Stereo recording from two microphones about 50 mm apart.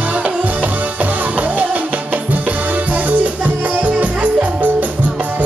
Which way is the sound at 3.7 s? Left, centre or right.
Right.